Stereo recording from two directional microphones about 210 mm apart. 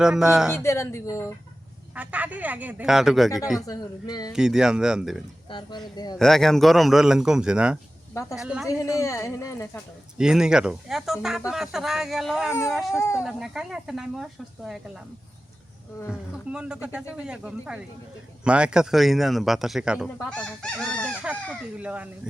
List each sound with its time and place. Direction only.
0.0 s speech: 5° right (ahead or behind)
0.5 s speech: 10° left (ahead or behind)
2.0 s speech: 5° right (ahead or behind)
3.7 s speech: 20° left (ahead or behind)
4.3 s speech: 5° right (ahead or behind)
5.5 s speech: 20° left (ahead or behind)
6.1 s speech: centre (ahead or behind)
8.6 s speech: 15° left (ahead or behind)
10.2 s speech: 5° right (ahead or behind)
13.0 s speech: 15° left (ahead or behind)
13.2 s speech: centre (ahead or behind)
16.0 s speech: 5° right (ahead or behind)